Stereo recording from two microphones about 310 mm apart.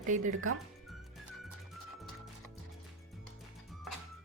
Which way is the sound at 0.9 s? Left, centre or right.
Centre.